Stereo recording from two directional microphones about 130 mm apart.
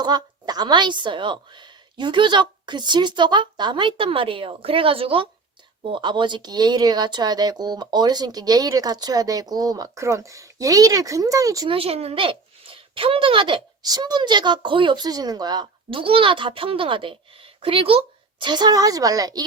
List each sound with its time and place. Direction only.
0.0 s speech: 30° right (ahead or behind)
11.7 s speech: 50° right (ahead or behind); by 19.5 s 30° right (ahead or behind)